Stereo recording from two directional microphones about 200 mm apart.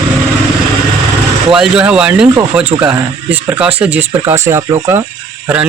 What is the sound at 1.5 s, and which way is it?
Speech, 5° right (ahead or behind).